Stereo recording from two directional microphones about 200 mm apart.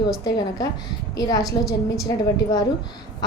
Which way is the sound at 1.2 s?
20° left (ahead or behind).